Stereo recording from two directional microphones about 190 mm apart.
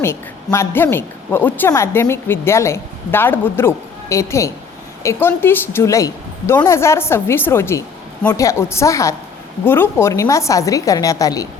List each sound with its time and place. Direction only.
0.0 s a woman's voice: 15° left (ahead or behind)